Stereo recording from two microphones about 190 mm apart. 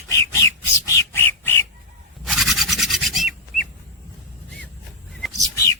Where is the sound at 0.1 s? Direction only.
15° left (ahead or behind).